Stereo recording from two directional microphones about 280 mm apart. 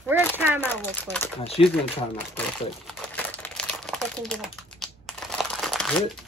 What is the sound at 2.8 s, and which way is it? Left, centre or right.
Crumpling, centre.